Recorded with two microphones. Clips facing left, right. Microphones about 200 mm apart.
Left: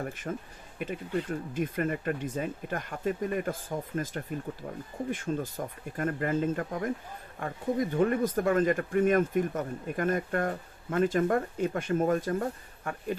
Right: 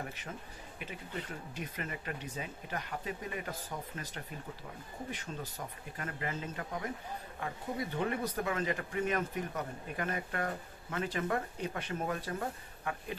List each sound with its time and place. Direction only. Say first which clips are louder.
0.0 s speech: left 8 dB; 50° left (ahead or behind)